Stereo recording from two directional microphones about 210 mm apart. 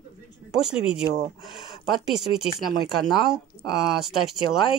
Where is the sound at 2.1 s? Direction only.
Centre (ahead or behind).